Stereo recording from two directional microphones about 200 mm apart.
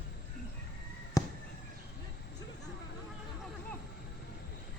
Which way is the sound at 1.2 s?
15° left (ahead or behind).